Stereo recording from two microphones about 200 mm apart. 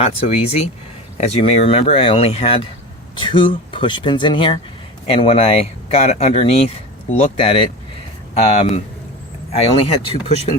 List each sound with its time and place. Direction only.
0.0 s speech: 30° left (ahead or behind)
9.5 s speech: 30° left (ahead or behind)